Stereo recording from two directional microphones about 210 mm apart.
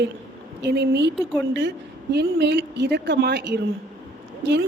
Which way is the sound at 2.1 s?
55° right (ahead or behind).